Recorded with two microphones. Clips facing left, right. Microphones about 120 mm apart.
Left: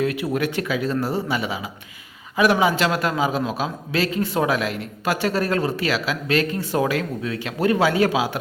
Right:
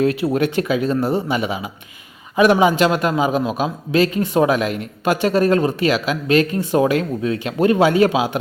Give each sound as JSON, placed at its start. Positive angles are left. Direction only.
{"t": 0.0, "sound": "a man's voice", "side_deg": -30}